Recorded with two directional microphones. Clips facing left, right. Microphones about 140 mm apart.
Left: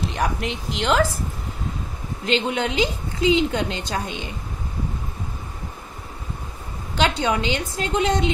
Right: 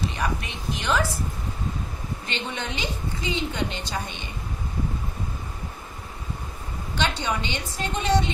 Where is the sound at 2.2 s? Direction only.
90° left.